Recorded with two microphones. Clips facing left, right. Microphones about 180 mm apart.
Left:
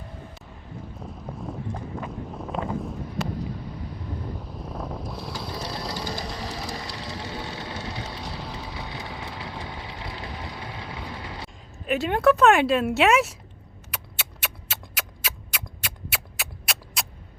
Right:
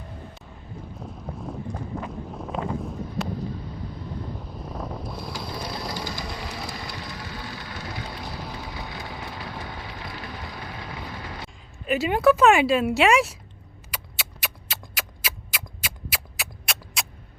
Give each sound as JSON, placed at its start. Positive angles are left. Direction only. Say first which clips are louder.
{"t": 0.9, "sound": "wind noise", "louder": "right 1 dB", "side_deg": 0}
{"t": 4.4, "sound": "a sound", "louder": "even", "side_deg": 0}
{"t": 6.5, "sound": "vehicle", "louder": "left 1 dB", "side_deg": 35}
{"t": 8.1, "sound": "vehicle", "louder": "even", "side_deg": -5}
{"t": 8.9, "sound": "vehicle", "louder": "even", "side_deg": 20}
{"t": 9.1, "sound": "vehicle", "louder": "even", "side_deg": -5}
{"t": 9.4, "sound": "vehicle", "louder": "even", "side_deg": 20}
{"t": 10.8, "sound": "vehicle", "louder": "even", "side_deg": 0}
{"t": 11.2, "sound": "artillery fire", "louder": "even", "side_deg": 25}
{"t": 11.4, "sound": "speech", "louder": "right 1 dB", "side_deg": 0}
{"t": 13.9, "sound": "a sound", "louder": "even", "side_deg": 0}